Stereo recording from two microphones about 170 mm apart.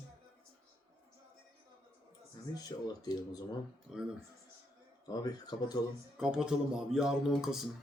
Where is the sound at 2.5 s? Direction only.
20° left (ahead or behind).